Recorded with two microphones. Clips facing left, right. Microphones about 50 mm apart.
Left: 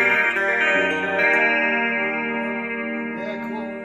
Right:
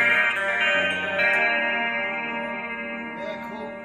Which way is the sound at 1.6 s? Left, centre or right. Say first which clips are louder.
Left 4 dB; left.